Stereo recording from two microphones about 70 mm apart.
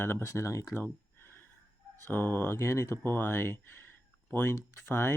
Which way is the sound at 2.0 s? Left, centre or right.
Left.